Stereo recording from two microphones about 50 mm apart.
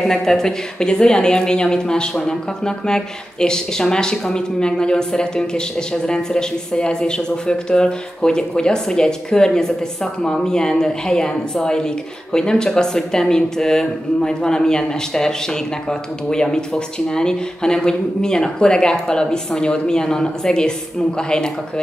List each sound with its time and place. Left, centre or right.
0.0 s a woman's voice: centre